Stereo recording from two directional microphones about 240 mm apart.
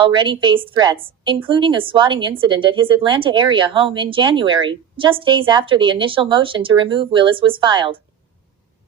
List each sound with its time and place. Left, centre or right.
0.0 s a woman's voice: centre